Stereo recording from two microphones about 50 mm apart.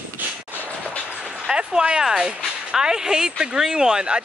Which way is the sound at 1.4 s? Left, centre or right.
Centre.